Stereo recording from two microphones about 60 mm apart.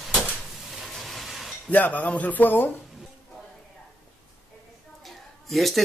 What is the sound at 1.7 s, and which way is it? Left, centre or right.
Speech, left.